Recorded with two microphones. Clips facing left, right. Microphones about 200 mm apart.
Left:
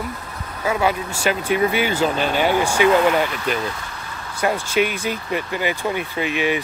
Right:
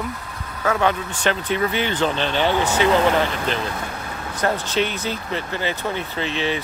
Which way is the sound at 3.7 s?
55° right (ahead or behind).